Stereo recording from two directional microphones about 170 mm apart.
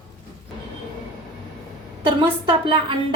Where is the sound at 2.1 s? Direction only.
30° right (ahead or behind).